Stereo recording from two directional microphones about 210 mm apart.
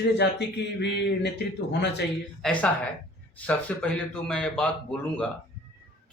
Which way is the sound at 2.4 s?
5° left (ahead or behind).